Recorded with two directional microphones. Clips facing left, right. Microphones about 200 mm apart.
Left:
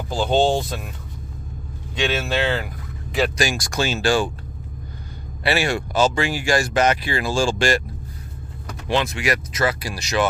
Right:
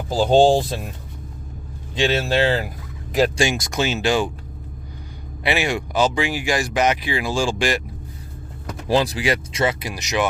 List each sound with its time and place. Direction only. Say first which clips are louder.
0.1 s speech: right 4 dB; 35° right (ahead or behind)
2.0 s speech: right 3 dB; 35° right (ahead or behind)
3.3 s speech: right 2 dB; 25° right (ahead or behind)
5.4 s speech: even; 15° right (ahead or behind)
8.9 s speech: right 3 dB; 35° right (ahead or behind); by 10.2 s 15° right (ahead or behind)